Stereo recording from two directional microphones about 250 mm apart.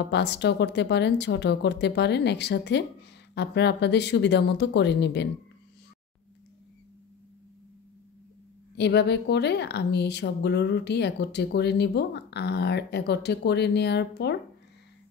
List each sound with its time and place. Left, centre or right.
0.1 s speech: left
8.7 s speech: left